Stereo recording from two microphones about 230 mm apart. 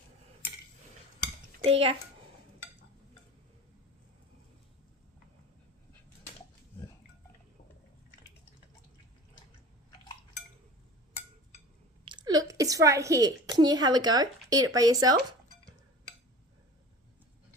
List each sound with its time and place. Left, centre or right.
1.6 s a child's voice: right
12.0 s a woman's voice: centre